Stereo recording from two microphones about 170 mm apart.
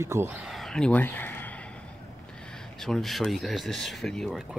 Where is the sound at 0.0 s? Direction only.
15° right (ahead or behind).